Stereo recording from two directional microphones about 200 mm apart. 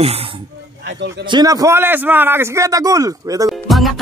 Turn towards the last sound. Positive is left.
turn(degrees=0)  # may be behind; listen again after turning